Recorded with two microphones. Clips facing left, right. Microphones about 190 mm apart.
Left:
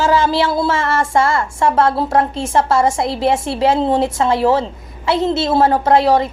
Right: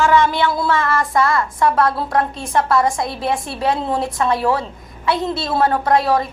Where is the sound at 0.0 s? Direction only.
30° left (ahead or behind).